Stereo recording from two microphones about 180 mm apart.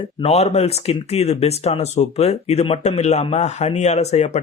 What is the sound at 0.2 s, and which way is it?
Speech, 35° left (ahead or behind).